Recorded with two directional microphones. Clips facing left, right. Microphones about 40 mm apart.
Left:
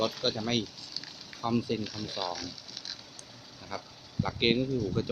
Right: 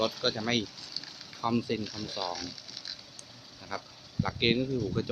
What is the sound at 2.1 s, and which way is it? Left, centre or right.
Speech, centre.